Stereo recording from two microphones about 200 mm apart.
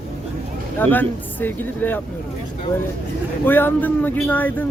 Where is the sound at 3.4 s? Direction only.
10° left (ahead or behind).